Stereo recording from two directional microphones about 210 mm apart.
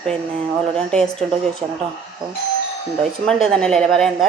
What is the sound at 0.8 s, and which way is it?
Speech, 5° left (ahead or behind).